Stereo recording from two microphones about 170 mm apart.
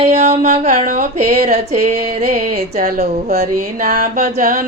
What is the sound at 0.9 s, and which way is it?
Music, 60° right (ahead or behind).